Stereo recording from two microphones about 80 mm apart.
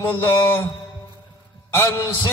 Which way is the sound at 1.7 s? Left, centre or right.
Left.